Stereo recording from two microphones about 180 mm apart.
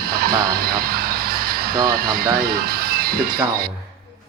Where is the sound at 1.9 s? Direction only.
55° right (ahead or behind).